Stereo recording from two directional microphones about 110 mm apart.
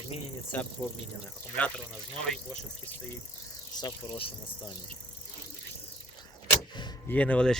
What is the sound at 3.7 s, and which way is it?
Speech, 40° left (ahead or behind).